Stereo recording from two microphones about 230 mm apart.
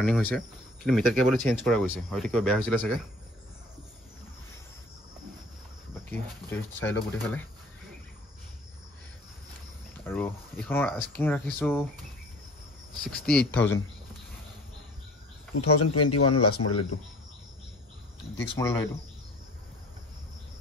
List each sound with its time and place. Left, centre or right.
0.0 s speech: centre
6.0 s speech: centre
10.0 s speech: centre
13.4 s speech: left
15.5 s speech: left
18.6 s speech: centre